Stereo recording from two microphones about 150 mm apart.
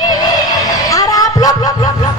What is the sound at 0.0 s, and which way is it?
Music, 25° left (ahead or behind).